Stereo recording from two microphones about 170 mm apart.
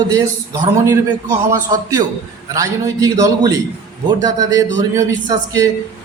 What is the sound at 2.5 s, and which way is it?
A man's voice, 20° right (ahead or behind).